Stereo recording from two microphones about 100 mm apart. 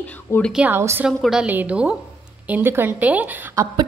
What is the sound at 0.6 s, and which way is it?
Speech, 25° right (ahead or behind).